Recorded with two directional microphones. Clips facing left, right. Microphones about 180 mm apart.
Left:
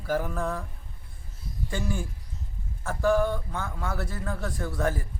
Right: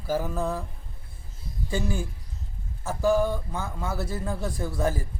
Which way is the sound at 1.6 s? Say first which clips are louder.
Right 2 dB; 5° right (ahead or behind).